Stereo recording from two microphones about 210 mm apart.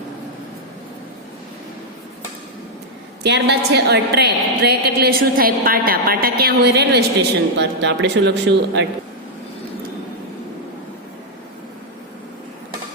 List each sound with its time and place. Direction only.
3.2 s a woman's voice: 55° right (ahead or behind)